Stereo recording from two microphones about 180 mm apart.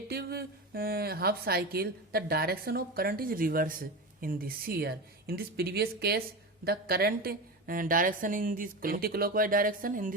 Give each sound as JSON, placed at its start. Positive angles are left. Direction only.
{"t": 0.1, "sound": "a woman's voice", "side_deg": -60}